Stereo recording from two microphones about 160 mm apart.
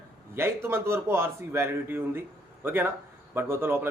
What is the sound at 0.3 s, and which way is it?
Speech, 15° right (ahead or behind).